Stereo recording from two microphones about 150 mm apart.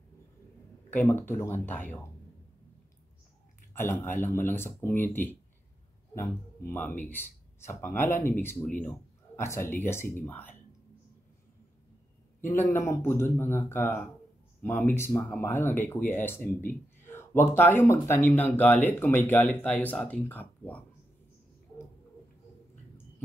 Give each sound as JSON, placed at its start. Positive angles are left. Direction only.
{"t": 0.8, "sound": "speech", "side_deg": 15}
{"t": 3.7, "sound": "speech", "side_deg": 15}
{"t": 6.6, "sound": "speech", "side_deg": 15}
{"t": 12.4, "sound": "speech", "side_deg": 15}